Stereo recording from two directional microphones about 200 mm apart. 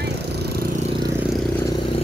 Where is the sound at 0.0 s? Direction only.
55° right (ahead or behind).